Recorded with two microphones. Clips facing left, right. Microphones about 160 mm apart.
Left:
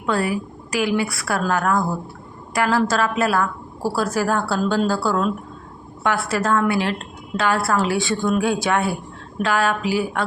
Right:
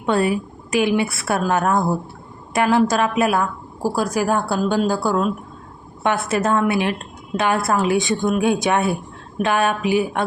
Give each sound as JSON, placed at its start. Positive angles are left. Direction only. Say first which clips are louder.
{"t": 0.0, "sound": "a woman's voice", "louder": "right 3 dB", "side_deg": -25}